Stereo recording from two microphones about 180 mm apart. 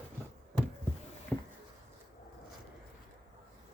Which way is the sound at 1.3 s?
5° left (ahead or behind).